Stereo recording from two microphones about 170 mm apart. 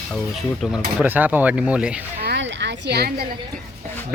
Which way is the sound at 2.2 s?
90° right.